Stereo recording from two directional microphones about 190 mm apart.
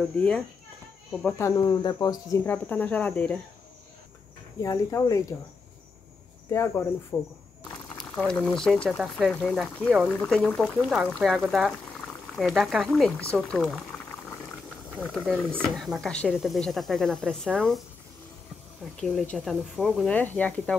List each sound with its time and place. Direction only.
0.0 s speech: 5° left (ahead or behind)
1.4 s speech: 15° left (ahead or behind)
4.6 s speech: 15° left (ahead or behind)
6.5 s speech: 15° left (ahead or behind)
8.0 s speech: centre (ahead or behind)
15.0 s speech: 5° left (ahead or behind)
18.9 s speech: centre (ahead or behind)